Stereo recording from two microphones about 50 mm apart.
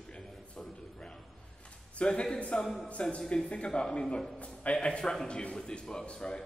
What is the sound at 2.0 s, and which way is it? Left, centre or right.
A man's voice, left.